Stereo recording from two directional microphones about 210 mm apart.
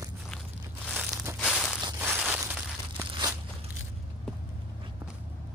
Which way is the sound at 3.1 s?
20° right (ahead or behind).